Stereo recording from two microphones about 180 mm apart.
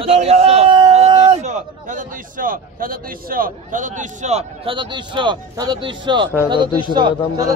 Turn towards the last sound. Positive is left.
turn(degrees=-25)  # may be behind; listen again after turning